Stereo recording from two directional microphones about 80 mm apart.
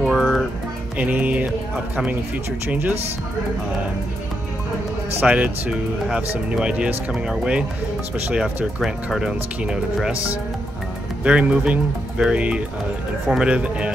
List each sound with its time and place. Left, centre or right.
0.0 s music: centre
0.9 s music: centre
5.2 s speech: centre
11.2 s speech: centre